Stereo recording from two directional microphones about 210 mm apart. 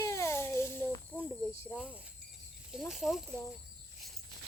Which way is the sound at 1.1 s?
5° left (ahead or behind).